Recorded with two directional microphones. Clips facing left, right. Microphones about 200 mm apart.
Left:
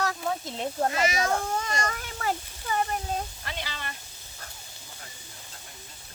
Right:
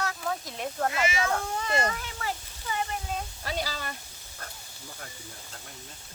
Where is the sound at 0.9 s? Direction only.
40° left (ahead or behind).